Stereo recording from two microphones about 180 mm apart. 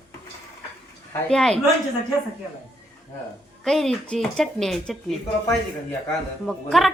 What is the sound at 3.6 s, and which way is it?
Speech, centre (ahead or behind).